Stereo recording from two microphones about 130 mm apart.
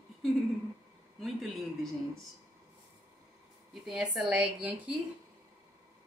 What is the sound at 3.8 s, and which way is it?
A woman's voice, 5° right (ahead or behind).